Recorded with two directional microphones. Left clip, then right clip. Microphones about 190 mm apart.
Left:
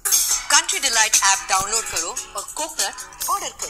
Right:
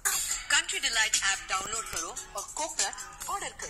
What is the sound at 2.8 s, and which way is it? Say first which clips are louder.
Speech: left 8 dB; 30° left (ahead or behind).